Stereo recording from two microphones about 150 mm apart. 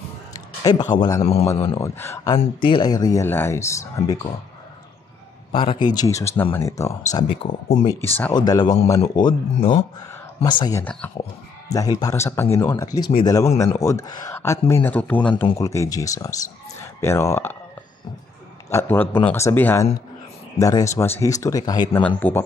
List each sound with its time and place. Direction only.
0.3 s a sound: 25° left (ahead or behind)
1.2 s a man's voice: 45° left (ahead or behind)
1.8 s speech: 15° left (ahead or behind)
2.3 s speech: 30° left (ahead or behind)
5.5 s speech: 35° left (ahead or behind); by 7.0 s 20° left (ahead or behind)
7.2 s speech: 35° left (ahead or behind)
7.9 s speech: 15° left (ahead or behind)
8.3 s speech: 25° left (ahead or behind)
10.8 s speech: 10° left (ahead or behind)
11.7 s speech: 25° left (ahead or behind)
18.7 s speech: 15° left (ahead or behind)